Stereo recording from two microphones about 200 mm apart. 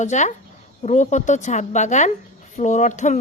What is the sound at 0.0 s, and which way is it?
A woman's voice, 35° left (ahead or behind).